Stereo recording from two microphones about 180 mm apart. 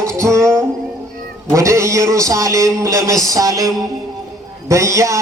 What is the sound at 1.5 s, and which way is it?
A man's voice, 15° right (ahead or behind).